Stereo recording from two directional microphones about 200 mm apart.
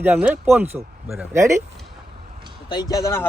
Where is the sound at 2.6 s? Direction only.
20° left (ahead or behind).